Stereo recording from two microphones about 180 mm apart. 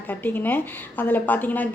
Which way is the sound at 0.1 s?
10° left (ahead or behind).